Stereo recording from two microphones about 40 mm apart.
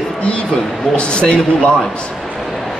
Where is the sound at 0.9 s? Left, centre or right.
Left.